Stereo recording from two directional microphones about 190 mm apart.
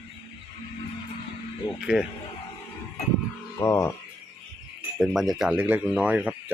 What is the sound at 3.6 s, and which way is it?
Speech, 15° left (ahead or behind).